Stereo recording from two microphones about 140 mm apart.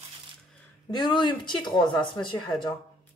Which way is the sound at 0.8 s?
30° left (ahead or behind).